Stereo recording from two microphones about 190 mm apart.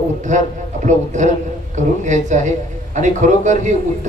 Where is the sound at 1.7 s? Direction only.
40° right (ahead or behind).